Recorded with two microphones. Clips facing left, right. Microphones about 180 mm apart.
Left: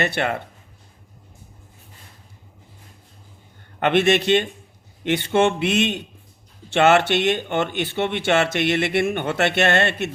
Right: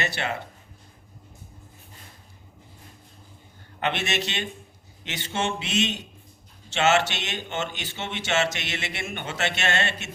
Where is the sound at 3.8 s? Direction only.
55° left (ahead or behind).